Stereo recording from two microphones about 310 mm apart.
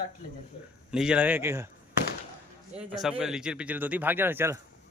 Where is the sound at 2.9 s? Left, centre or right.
Centre.